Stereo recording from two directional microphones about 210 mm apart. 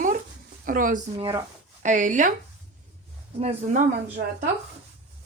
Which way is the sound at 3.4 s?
30° right (ahead or behind).